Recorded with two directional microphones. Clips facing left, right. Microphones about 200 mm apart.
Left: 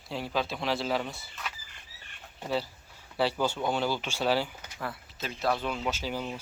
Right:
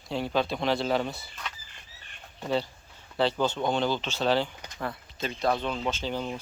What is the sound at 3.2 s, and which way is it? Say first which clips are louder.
Speech: right 2 dB; 10° left (ahead or behind).